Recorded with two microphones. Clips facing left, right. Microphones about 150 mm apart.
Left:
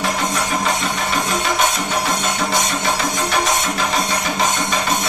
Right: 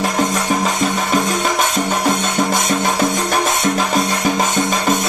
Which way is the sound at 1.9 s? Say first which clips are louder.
Right 3 dB; 45° right (ahead or behind).